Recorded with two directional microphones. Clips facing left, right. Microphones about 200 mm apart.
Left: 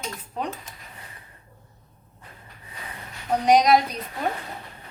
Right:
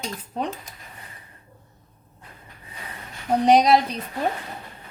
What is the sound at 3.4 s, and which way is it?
Speech, 30° right (ahead or behind).